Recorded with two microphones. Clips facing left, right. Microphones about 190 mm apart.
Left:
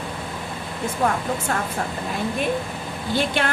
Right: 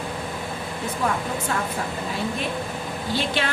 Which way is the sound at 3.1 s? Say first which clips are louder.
Left 3 dB; 50° left (ahead or behind).